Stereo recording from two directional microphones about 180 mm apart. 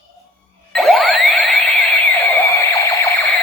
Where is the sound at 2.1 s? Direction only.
15° left (ahead or behind).